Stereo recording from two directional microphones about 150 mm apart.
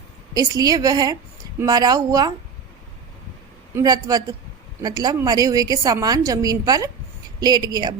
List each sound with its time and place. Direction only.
0.3 s a woman's voice: 25° right (ahead or behind)
3.8 s a woman's voice: 25° right (ahead or behind)